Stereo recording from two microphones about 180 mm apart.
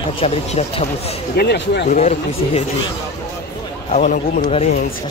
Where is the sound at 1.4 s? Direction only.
65° left (ahead or behind).